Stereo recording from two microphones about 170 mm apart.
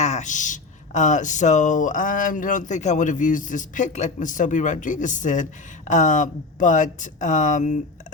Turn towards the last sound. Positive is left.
turn(degrees=45)  # may be behind; listen again after turning